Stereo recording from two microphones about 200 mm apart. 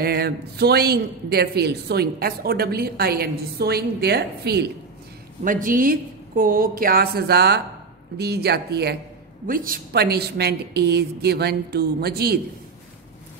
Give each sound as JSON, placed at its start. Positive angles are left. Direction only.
{"t": 0.0, "sound": "a woman's voice", "side_deg": -50}
{"t": 5.4, "sound": "a woman's voice", "side_deg": -40}